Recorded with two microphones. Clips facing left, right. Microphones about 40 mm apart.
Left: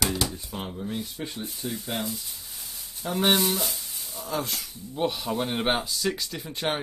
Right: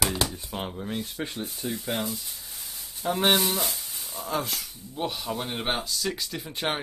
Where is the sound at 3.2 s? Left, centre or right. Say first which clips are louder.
Left 1 dB; centre.